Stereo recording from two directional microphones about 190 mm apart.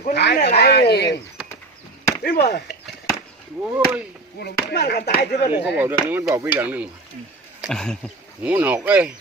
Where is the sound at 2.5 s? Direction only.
60° left (ahead or behind).